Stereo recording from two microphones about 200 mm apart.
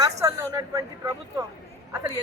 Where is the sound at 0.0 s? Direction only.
15° right (ahead or behind).